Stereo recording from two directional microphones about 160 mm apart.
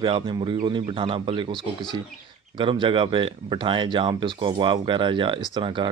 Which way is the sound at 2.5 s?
30° right (ahead or behind).